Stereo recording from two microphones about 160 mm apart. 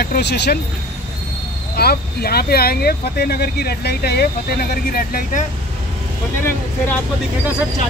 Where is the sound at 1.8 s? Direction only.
75° left (ahead or behind).